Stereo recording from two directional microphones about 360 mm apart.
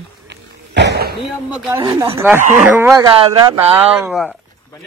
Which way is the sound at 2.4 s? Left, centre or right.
Right.